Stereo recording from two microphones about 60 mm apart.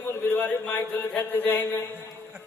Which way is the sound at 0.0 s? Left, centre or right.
Left.